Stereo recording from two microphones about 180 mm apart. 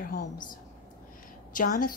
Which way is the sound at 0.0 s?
50° left (ahead or behind).